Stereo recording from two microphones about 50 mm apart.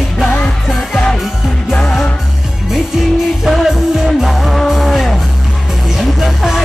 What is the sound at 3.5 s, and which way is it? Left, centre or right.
Music, centre.